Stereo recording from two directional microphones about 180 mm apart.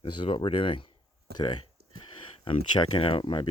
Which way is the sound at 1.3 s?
65° right (ahead or behind).